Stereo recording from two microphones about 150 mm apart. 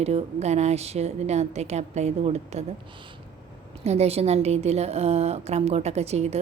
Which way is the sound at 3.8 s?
45° right (ahead or behind).